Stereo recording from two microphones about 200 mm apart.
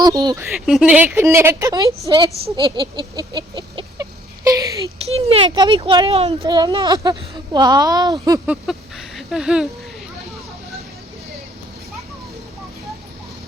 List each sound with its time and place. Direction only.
0.0 s speech: 20° right (ahead or behind)
0.6 s a woman's voice: 5° right (ahead or behind); by 2.3 s 20° right (ahead or behind)
2.6 s a sound: 25° right (ahead or behind)
5.0 s speech: 30° right (ahead or behind)
6.4 s speech: 20° right (ahead or behind)
8.6 s a sound: centre (ahead or behind)